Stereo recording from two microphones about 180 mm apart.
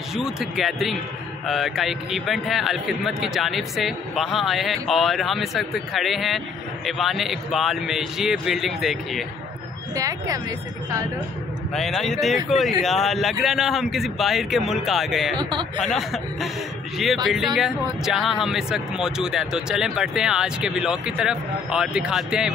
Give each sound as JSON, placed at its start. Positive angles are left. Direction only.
{"t": 0.1, "sound": "a man's voice", "side_deg": 0}
{"t": 9.9, "sound": "speech", "side_deg": -20}
{"t": 11.7, "sound": "a man's voice", "side_deg": 0}